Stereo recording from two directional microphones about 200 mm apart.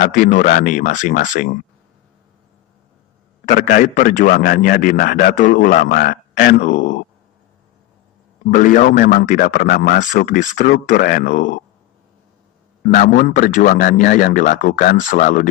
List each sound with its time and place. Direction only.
0.0 s speech: 40° left (ahead or behind)
3.4 s a man's voice: 45° left (ahead or behind)
8.5 s speech: 40° left (ahead or behind)
12.8 s speech: 45° left (ahead or behind)